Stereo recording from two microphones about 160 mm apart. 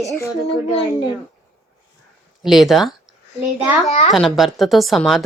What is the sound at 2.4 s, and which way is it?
Speech, centre (ahead or behind).